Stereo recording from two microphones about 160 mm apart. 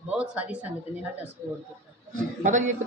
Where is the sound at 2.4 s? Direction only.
50° right (ahead or behind).